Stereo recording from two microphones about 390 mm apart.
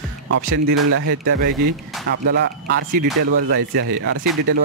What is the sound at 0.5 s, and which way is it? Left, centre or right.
Speech, right.